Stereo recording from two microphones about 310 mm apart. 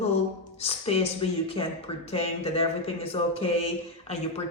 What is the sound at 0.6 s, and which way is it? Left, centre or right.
A woman's voice, centre.